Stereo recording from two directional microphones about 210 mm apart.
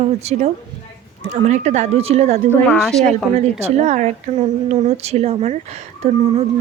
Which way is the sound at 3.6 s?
30° right (ahead or behind).